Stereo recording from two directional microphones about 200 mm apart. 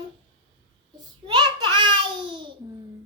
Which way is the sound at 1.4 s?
25° right (ahead or behind).